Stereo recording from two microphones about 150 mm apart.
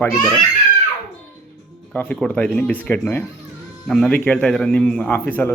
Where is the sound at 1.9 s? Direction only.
10° left (ahead or behind).